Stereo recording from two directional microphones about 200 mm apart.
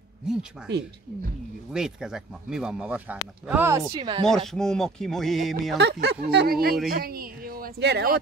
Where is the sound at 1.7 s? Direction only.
5° right (ahead or behind).